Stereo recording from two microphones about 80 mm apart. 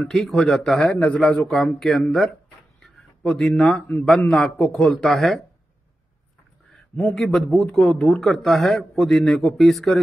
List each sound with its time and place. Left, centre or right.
0.1 s a man's voice: centre
0.8 s a man's voice: centre
7.2 s a man's voice: centre